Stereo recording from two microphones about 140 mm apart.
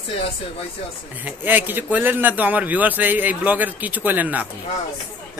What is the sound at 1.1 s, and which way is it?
A man's voice, 10° right (ahead or behind).